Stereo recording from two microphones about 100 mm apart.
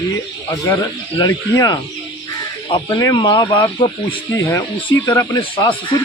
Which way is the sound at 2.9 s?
35° left (ahead or behind).